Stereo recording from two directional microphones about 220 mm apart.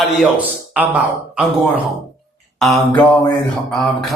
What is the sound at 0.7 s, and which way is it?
Speech, 5° right (ahead or behind).